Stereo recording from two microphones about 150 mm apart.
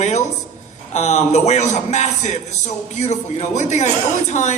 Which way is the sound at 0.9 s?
50° left (ahead or behind).